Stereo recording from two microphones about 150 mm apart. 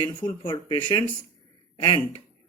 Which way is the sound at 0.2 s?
30° left (ahead or behind).